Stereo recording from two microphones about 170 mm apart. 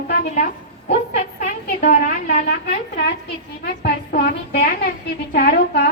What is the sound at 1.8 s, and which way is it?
Speech, 45° left (ahead or behind).